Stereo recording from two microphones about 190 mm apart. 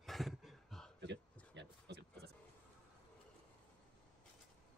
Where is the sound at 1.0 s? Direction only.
65° right (ahead or behind).